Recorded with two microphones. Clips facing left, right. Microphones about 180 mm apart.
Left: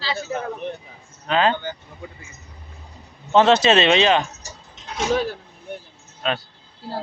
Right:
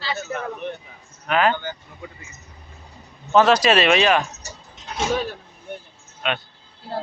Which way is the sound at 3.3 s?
25° left (ahead or behind).